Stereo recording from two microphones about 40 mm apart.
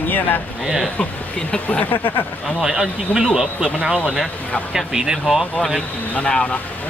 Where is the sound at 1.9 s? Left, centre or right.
Left.